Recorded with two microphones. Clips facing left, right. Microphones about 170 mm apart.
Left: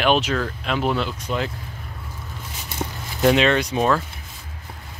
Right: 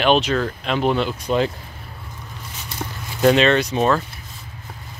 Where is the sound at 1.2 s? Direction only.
25° right (ahead or behind).